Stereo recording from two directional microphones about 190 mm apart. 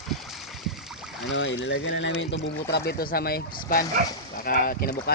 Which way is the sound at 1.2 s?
75° left (ahead or behind).